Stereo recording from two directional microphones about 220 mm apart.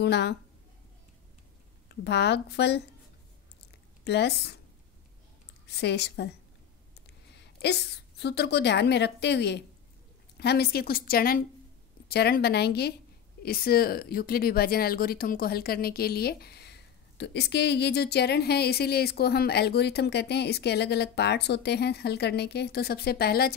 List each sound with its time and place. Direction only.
0.0 s speech: 50° left (ahead or behind)
1.9 s speech: 50° left (ahead or behind)
4.0 s speech: 50° left (ahead or behind)
5.7 s a woman's voice: 50° left (ahead or behind)